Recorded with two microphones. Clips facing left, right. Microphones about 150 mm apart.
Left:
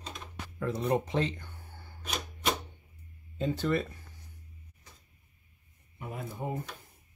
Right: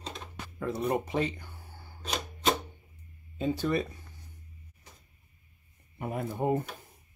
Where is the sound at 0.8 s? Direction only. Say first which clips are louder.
Even; 5° right (ahead or behind).